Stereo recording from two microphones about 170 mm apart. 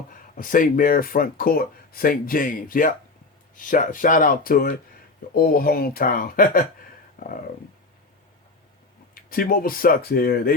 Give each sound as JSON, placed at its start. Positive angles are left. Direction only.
{"t": 0.1, "sound": "speech", "side_deg": 55}
{"t": 9.1, "sound": "speech", "side_deg": 60}